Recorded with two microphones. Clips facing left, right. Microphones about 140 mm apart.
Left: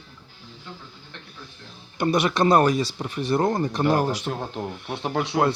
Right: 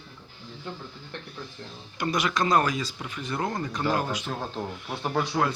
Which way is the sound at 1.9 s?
30° left (ahead or behind).